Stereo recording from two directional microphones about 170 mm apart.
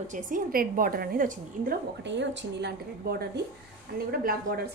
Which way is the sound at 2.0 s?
90° right.